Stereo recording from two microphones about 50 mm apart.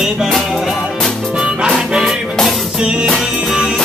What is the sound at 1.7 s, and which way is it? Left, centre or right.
Music, centre.